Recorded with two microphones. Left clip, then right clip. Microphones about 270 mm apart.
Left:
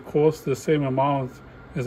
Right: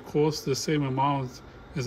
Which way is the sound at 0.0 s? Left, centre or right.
Centre.